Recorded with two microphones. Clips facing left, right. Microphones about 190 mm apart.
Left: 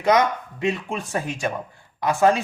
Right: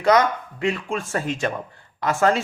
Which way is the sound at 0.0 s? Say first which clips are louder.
Right 1 dB; 20° left (ahead or behind).